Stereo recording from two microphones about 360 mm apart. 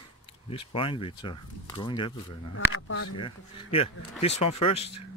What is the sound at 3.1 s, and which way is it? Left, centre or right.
Speech, centre.